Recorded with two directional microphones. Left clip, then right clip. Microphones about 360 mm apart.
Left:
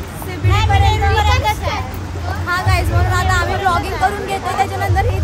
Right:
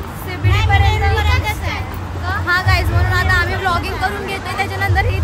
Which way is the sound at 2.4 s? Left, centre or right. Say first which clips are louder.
Right 1 dB; centre.